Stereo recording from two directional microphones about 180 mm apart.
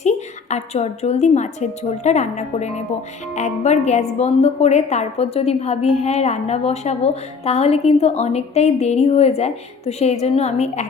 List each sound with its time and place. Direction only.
0.5 s speech: 40° left (ahead or behind)